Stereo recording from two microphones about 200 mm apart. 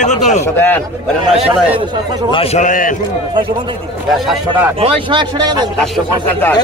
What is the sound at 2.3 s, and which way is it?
Speech, 30° left (ahead or behind).